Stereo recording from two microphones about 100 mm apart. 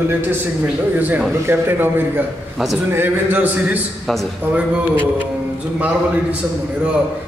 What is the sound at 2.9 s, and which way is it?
Speech, 20° right (ahead or behind).